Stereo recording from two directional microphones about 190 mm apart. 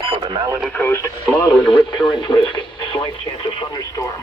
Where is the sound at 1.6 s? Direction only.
25° left (ahead or behind).